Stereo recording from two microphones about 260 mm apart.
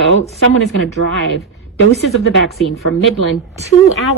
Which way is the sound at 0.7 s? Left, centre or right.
Left.